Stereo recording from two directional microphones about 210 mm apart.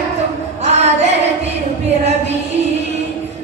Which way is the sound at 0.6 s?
30° right (ahead or behind).